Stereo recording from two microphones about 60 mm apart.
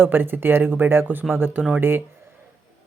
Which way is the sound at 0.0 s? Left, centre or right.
Right.